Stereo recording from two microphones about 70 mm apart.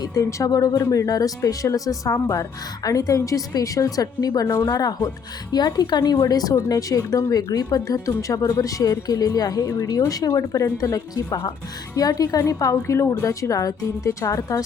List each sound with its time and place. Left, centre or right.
0.0 s speech: left
5.5 s speech: left
7.9 s a woman's voice: left